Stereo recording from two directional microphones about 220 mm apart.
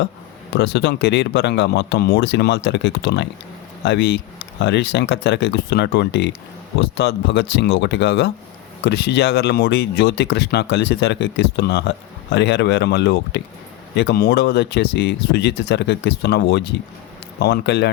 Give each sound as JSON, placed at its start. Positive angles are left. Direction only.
{"t": 0.5, "sound": "speech", "side_deg": 50}